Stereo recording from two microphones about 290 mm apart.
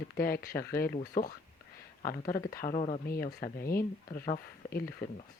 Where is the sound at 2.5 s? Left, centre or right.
Left.